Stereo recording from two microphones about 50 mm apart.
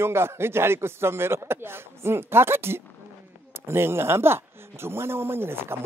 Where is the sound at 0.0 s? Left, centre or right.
Right.